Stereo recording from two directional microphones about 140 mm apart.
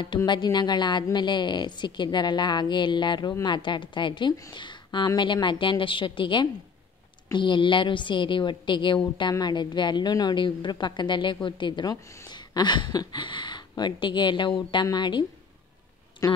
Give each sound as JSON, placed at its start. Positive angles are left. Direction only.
{"t": 0.3, "sound": "a woman's voice", "side_deg": 30}